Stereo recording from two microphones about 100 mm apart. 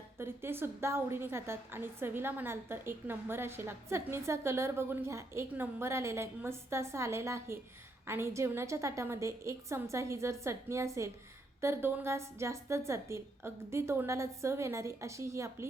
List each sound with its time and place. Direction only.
0.2 s a woman's voice: 25° right (ahead or behind)